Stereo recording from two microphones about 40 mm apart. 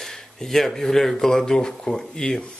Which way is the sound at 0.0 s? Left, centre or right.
Centre.